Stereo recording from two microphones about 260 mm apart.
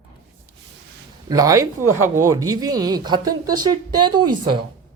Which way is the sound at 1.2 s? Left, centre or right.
Centre.